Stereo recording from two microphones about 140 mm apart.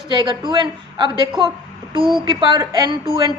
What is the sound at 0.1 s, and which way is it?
A woman's voice, 35° right (ahead or behind).